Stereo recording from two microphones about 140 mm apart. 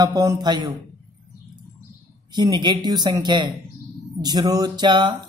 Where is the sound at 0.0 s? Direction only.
25° right (ahead or behind).